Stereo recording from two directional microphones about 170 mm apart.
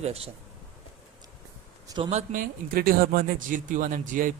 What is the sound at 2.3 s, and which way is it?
Speech, 55° right (ahead or behind).